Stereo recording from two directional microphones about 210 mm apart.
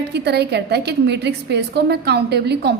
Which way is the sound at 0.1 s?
50° right (ahead or behind).